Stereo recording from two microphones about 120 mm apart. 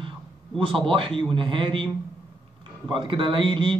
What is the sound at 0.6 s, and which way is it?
Speech, 45° right (ahead or behind).